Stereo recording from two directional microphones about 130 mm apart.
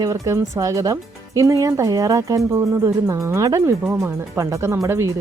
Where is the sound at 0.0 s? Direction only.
25° right (ahead or behind).